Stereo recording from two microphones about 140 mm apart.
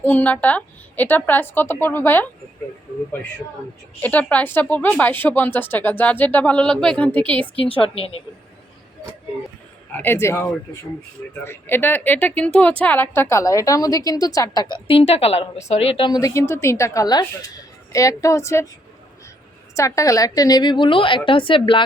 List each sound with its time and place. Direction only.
0.0 s speech: 10° left (ahead or behind)
4.0 s speech: 10° left (ahead or behind)
7.5 s a woman's voice: 40° left (ahead or behind)
9.9 s speech: 15° left (ahead or behind)
11.4 s speech: 15° left (ahead or behind)
14.8 s a woman's voice: 45° left (ahead or behind); by 18.7 s 20° left (ahead or behind)
19.7 s a woman's voice: 20° left (ahead or behind)